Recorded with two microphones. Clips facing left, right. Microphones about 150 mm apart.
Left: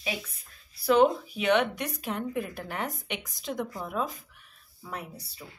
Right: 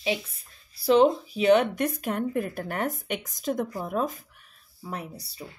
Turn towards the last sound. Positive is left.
turn(degrees=-30)  # may be behind; listen again after turning